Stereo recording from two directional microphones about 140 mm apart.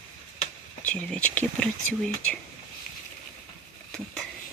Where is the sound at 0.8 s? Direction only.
10° left (ahead or behind).